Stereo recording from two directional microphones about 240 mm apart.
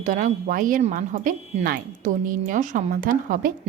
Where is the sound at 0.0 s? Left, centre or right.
Right.